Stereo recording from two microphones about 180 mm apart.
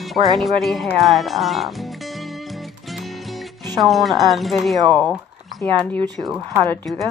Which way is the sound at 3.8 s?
Centre (ahead or behind).